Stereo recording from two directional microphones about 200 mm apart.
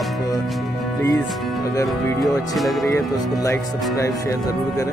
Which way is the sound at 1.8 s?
Centre (ahead or behind).